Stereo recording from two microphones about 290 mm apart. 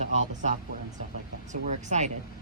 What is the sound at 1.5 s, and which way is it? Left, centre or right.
Speech, right.